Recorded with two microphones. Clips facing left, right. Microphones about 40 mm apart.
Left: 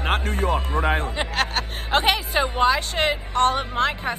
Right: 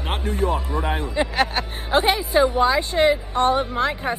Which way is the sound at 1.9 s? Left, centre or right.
Left.